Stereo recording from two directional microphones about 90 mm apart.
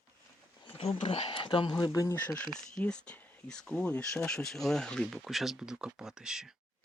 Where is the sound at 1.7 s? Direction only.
45° left (ahead or behind).